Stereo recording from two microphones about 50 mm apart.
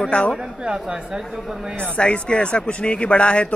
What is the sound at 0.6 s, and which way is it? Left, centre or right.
Speech, centre.